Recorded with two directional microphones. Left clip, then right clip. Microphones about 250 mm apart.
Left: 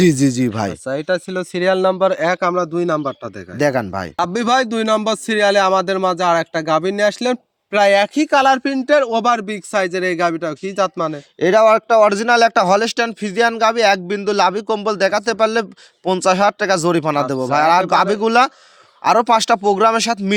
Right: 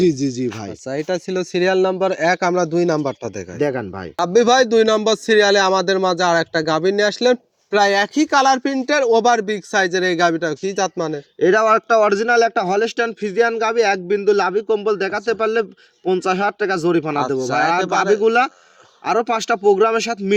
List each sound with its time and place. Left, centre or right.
0.0 s speech: left
0.9 s speech: centre
3.6 s a man's voice: left
4.2 s a man's voice: centre
12.1 s a man's voice: left